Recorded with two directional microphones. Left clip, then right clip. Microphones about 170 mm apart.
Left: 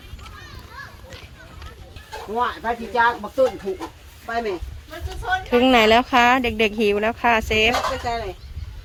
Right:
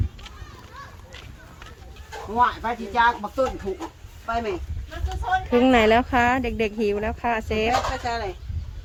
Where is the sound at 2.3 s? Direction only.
25° right (ahead or behind).